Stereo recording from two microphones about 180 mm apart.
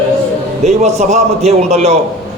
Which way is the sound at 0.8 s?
40° right (ahead or behind).